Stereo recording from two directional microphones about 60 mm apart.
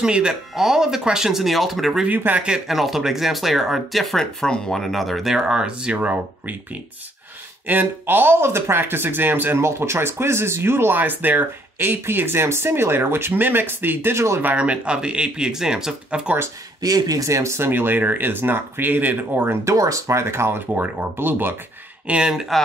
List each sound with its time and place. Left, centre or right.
0.0 s speech: centre
2.0 s speech: right
2.7 s speech: centre
5.9 s speech: right
7.6 s speech: right
14.4 s speech: right
16.8 s speech: right
17.6 s speech: right
19.6 s speech: right
20.7 s speech: right
22.0 s speech: centre